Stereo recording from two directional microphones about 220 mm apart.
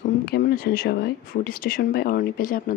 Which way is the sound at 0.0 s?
45° left (ahead or behind).